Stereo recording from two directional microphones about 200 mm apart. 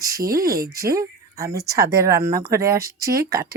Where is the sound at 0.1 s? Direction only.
45° right (ahead or behind).